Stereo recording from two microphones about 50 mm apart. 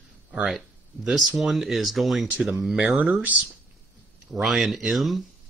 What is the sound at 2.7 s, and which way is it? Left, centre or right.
Speech, right.